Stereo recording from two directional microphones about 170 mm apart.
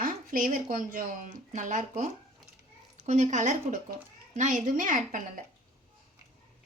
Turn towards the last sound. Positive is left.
turn(degrees=-50)  # may be behind; listen again after turning